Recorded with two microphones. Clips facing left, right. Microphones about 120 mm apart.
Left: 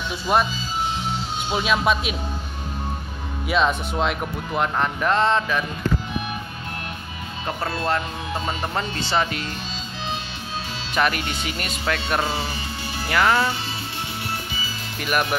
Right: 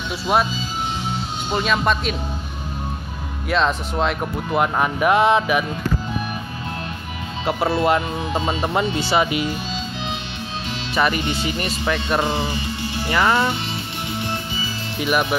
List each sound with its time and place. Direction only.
0.3 s speech: 5° right (ahead or behind)
1.5 s speech: 5° left (ahead or behind)
3.4 s speech: 5° left (ahead or behind); by 5.7 s 15° right (ahead or behind)
7.4 s speech: 10° right (ahead or behind)
11.0 s speech: 5° right (ahead or behind)
12.2 s speech: 20° right (ahead or behind)
13.1 s speech: centre (ahead or behind)
15.0 s speech: centre (ahead or behind)